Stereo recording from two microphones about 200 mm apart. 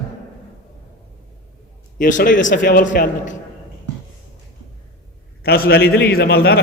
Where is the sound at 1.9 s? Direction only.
45° left (ahead or behind).